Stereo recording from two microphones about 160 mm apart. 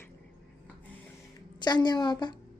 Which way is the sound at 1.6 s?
25° left (ahead or behind).